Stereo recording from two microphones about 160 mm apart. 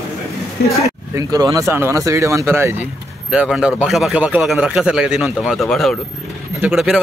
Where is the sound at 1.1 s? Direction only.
25° right (ahead or behind).